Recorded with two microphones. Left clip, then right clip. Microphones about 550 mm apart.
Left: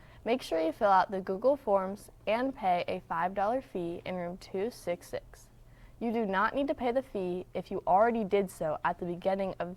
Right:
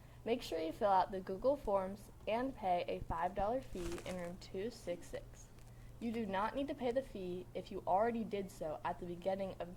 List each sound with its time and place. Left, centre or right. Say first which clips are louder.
0.3 s a woman's voice: left 9 dB; left